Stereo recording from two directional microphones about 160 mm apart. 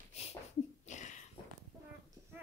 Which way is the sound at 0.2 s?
40° left (ahead or behind).